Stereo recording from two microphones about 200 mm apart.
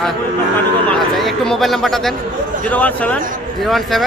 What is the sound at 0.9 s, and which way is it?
Speech, centre (ahead or behind).